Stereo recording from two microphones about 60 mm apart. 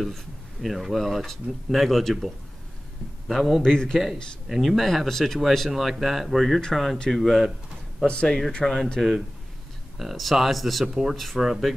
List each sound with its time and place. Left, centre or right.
0.0 s speech: centre
3.6 s speech: centre
4.5 s speech: centre
8.1 s speech: centre
9.9 s speech: centre